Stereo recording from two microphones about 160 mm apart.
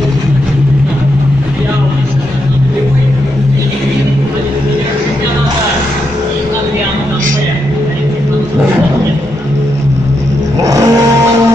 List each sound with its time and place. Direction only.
10.6 s vehicle: 20° right (ahead or behind)